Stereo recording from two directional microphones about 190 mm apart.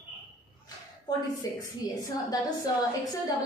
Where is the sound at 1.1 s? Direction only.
20° left (ahead or behind).